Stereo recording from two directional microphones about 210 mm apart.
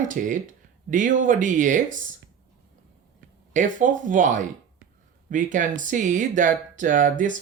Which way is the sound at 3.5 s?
40° right (ahead or behind).